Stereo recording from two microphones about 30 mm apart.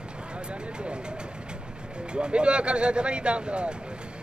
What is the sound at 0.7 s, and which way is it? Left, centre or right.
Speech, right.